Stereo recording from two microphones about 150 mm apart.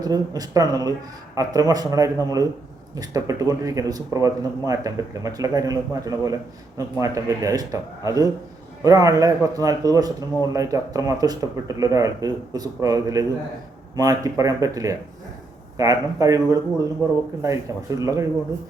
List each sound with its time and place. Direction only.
0.0 s speech: 25° right (ahead or behind)
17.0 s speech: 10° right (ahead or behind)
17.4 s speech: 20° right (ahead or behind)